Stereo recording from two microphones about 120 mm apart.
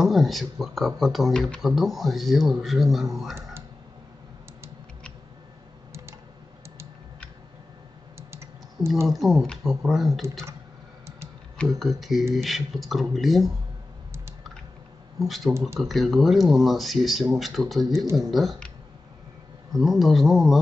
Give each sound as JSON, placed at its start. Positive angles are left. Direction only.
{"t": 0.0, "sound": "speech", "side_deg": 0}
{"t": 8.2, "sound": "typing", "side_deg": -20}
{"t": 9.0, "sound": "speech", "side_deg": 0}
{"t": 11.8, "sound": "speech", "side_deg": 0}
{"t": 15.1, "sound": "speech", "side_deg": 0}
{"t": 19.8, "sound": "speech", "side_deg": 0}